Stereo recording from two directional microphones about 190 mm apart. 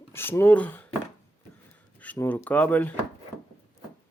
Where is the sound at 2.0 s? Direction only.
10° left (ahead or behind).